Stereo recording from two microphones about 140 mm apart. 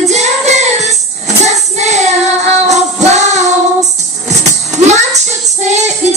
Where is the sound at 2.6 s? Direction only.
55° right (ahead or behind).